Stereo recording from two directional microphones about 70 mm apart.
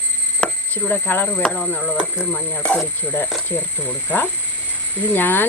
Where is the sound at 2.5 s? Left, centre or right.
Centre.